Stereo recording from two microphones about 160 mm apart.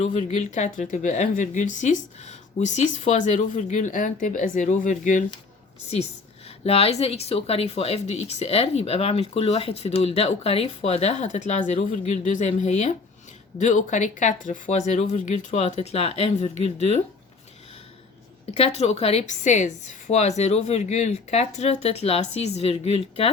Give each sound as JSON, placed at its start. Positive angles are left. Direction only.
{"t": 0.0, "sound": "speech", "side_deg": 45}
{"t": 6.7, "sound": "speech", "side_deg": 40}
{"t": 18.5, "sound": "speech", "side_deg": 40}